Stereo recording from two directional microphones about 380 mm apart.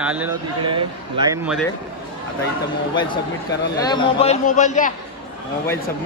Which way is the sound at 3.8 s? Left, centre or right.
Centre.